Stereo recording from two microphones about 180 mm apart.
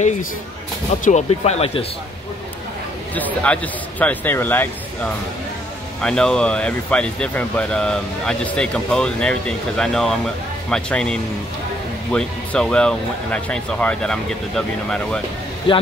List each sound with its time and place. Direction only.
1.0 s speech: 40° left (ahead or behind)
3.2 s speech: 10° left (ahead or behind)
15.7 s a man's voice: 30° left (ahead or behind)